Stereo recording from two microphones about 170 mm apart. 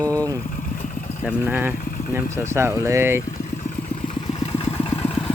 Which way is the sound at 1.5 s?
10° right (ahead or behind).